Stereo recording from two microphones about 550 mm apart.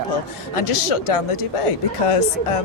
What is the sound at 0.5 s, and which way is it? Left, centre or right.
Speech, left.